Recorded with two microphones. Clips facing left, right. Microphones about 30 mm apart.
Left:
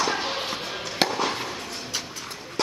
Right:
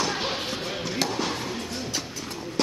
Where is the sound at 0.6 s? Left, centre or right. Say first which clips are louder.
Right 1 dB; centre.